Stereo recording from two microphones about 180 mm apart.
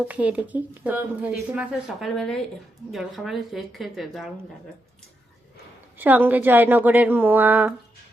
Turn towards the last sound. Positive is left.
turn(degrees=-10)  # may be behind; listen again after turning